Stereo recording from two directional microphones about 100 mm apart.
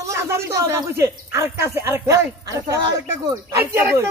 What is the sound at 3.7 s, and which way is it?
Speech, 25° right (ahead or behind).